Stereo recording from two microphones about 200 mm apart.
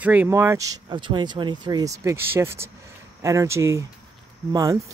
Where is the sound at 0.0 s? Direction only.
10° right (ahead or behind).